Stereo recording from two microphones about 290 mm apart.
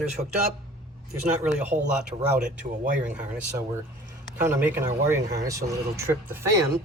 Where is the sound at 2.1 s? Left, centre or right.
Centre.